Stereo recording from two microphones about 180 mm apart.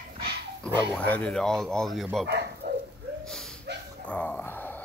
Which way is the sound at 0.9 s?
5° left (ahead or behind).